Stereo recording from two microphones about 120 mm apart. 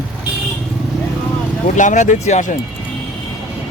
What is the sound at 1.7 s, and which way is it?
Speech, 90° left.